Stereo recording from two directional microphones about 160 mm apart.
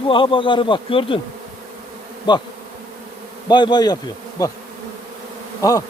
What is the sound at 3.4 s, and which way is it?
Bee, 30° left (ahead or behind).